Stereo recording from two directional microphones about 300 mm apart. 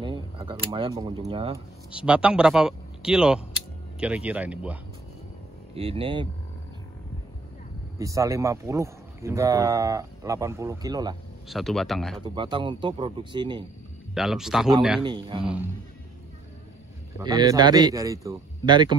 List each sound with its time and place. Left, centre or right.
0.0 s speech: centre
1.9 s speech: centre
5.8 s speech: centre
8.0 s speech: centre
11.4 s speech: centre
12.4 s speech: centre
14.1 s speech: centre
15.0 s speech: centre
17.2 s speech: centre